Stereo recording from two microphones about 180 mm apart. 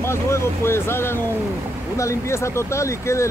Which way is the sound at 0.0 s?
15° left (ahead or behind).